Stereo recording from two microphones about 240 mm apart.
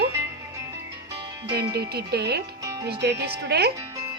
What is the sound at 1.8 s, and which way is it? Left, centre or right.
Speech, right.